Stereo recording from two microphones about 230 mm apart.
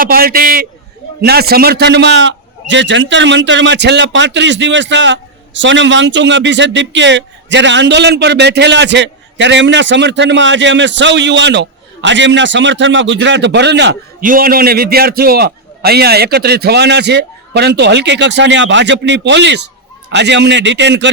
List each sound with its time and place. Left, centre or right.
0.0 s a man's voice: right